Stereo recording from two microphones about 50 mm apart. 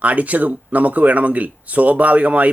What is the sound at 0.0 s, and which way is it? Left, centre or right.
Speech, right.